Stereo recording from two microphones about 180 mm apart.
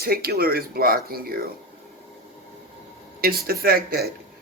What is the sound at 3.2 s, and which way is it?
Speech, 55° right (ahead or behind).